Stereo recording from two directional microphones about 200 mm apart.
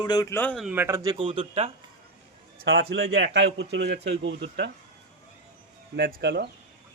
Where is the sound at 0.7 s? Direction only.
10° right (ahead or behind); by 1.7 s 30° right (ahead or behind).